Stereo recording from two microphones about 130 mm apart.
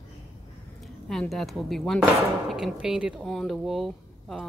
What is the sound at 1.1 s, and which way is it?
Speech, centre (ahead or behind).